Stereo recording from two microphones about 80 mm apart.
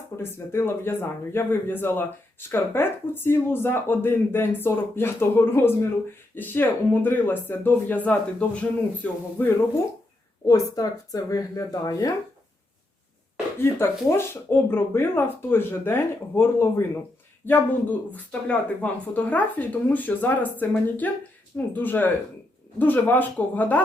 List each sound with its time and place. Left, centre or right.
0.2 s speech: left
10.4 s speech: left
13.6 s speech: left